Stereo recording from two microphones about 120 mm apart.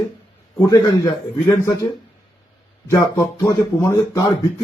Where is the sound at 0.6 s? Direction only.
30° left (ahead or behind).